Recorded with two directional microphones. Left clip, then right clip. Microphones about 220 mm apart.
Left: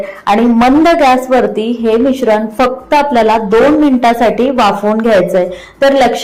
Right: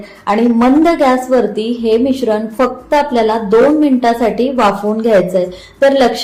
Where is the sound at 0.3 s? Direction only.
15° left (ahead or behind).